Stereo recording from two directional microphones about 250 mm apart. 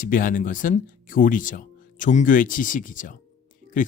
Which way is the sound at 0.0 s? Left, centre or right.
Left.